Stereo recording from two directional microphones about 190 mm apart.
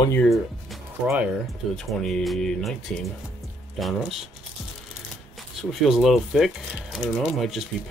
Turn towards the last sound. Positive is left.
turn(degrees=0)  # may be behind; listen again after turning